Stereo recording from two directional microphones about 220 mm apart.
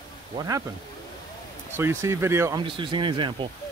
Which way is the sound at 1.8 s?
10° right (ahead or behind).